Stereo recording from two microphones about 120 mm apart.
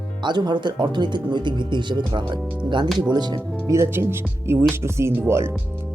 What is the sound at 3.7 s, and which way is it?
Speech, 25° right (ahead or behind).